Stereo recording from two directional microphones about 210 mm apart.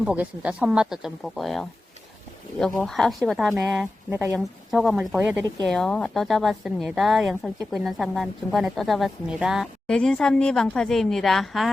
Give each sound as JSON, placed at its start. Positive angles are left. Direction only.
{"t": 0.0, "sound": "speech", "side_deg": -5}
{"t": 4.4, "sound": "speech", "side_deg": 0}